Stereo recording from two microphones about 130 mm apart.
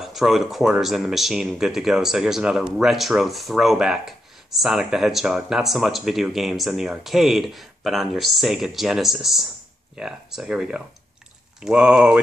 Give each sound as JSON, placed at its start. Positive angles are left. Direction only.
{"t": 0.0, "sound": "speech", "side_deg": 0}